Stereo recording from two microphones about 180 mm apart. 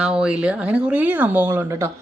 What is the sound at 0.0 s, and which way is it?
Speech, 5° right (ahead or behind).